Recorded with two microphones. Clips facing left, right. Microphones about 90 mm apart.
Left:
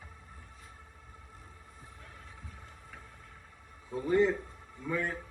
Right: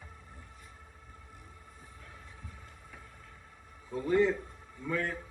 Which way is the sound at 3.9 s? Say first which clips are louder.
Even; 20° left (ahead or behind).